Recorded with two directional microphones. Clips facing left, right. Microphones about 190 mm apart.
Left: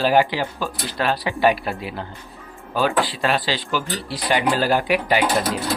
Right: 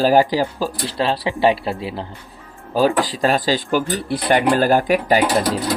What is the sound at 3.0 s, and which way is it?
Speech, 40° right (ahead or behind).